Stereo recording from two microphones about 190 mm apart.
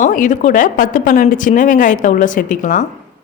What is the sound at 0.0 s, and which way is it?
Speech, 45° left (ahead or behind).